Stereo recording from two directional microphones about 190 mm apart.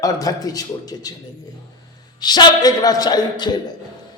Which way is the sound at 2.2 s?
20° left (ahead or behind).